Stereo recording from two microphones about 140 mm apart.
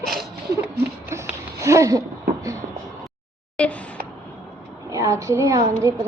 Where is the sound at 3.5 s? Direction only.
10° left (ahead or behind).